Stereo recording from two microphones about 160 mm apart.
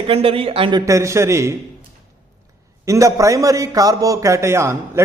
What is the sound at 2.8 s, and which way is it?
A man's voice, 20° right (ahead or behind).